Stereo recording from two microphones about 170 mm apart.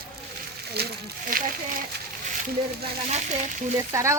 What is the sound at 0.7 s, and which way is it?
Speech, 70° right (ahead or behind).